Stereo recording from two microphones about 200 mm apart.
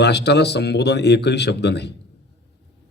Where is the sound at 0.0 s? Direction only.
55° left (ahead or behind).